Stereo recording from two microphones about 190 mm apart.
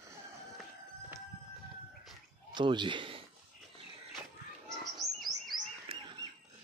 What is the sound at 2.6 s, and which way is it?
Speech, 25° right (ahead or behind).